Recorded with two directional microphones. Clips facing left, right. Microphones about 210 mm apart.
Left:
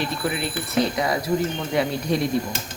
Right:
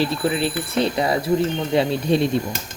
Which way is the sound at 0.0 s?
30° right (ahead or behind).